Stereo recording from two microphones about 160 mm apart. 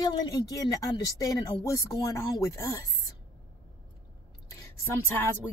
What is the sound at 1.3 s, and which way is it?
Speech, 25° left (ahead or behind).